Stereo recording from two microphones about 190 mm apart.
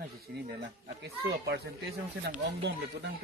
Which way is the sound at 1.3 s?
60° right (ahead or behind).